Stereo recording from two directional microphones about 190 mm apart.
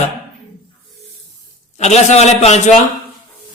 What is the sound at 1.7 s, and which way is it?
Speech, 35° left (ahead or behind).